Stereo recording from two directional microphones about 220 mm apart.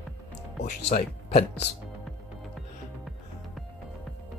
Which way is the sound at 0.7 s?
30° left (ahead or behind).